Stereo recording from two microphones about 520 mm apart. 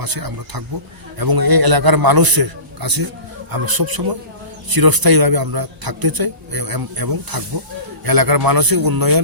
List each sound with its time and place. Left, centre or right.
0.0 s a man's voice: right